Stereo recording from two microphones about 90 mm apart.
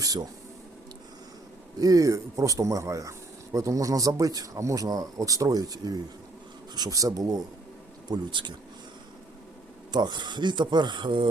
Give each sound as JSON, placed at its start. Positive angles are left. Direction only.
{"t": 0.0, "sound": "speech", "side_deg": -45}
{"t": 1.8, "sound": "speech", "side_deg": -40}
{"t": 8.0, "sound": "speech", "side_deg": -55}
{"t": 9.9, "sound": "speech", "side_deg": -55}